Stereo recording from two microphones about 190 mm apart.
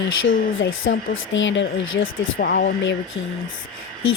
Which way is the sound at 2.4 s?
55° left (ahead or behind).